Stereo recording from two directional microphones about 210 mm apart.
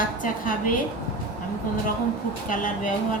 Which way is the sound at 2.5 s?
40° left (ahead or behind).